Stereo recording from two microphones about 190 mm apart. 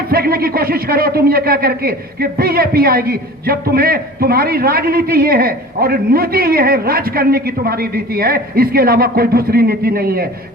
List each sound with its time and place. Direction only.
0.1 s speech: 55° right (ahead or behind)